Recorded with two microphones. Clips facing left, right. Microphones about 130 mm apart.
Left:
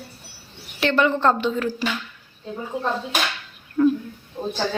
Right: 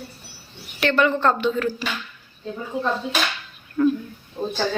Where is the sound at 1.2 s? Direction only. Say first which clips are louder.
Even; 25° left (ahead or behind).